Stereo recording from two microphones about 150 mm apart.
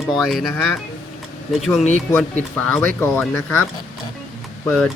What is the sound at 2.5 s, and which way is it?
Speech, 10° left (ahead or behind).